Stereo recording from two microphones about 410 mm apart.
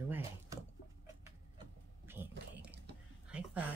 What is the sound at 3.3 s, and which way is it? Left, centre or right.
Speech, centre.